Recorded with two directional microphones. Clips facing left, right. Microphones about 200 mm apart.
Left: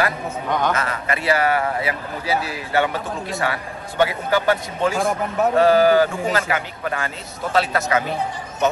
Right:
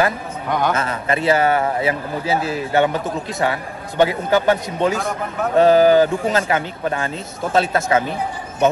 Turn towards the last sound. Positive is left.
turn(degrees=-25)  # may be behind; listen again after turning